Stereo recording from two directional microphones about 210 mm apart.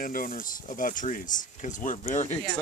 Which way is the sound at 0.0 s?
45° left (ahead or behind).